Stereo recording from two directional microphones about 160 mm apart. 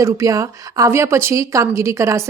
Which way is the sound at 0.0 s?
20° right (ahead or behind).